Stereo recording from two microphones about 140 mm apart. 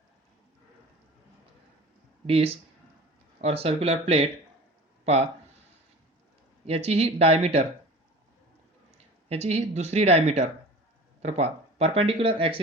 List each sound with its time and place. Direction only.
2.2 s speech: 45° right (ahead or behind)
6.7 s speech: 45° right (ahead or behind)
9.3 s speech: 50° right (ahead or behind)